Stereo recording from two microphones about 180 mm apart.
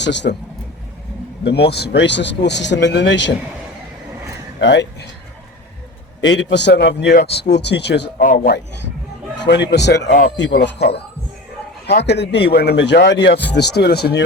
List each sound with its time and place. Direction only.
0.0 s speech: 75° left (ahead or behind)
1.7 s speech: 65° left (ahead or behind)
4.6 s speech: 75° left (ahead or behind)
6.2 s speech: 80° left
8.2 s speech: 50° left (ahead or behind)
9.4 s speech: 75° left (ahead or behind)